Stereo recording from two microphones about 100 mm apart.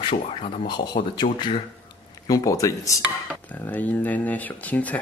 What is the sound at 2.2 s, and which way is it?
Speech, 35° left (ahead or behind).